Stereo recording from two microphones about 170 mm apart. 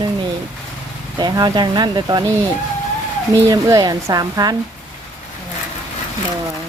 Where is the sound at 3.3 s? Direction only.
20° right (ahead or behind).